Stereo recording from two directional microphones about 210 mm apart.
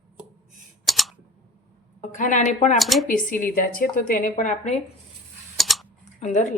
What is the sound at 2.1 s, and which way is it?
Speech, 40° left (ahead or behind).